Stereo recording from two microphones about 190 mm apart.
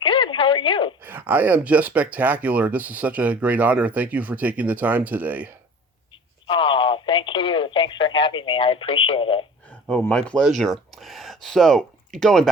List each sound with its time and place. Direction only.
0.0 s a sound: 25° left (ahead or behind)
1.0 s speech: 10° right (ahead or behind)
6.5 s speech: 25° left (ahead or behind)
9.9 s speech: 5° left (ahead or behind)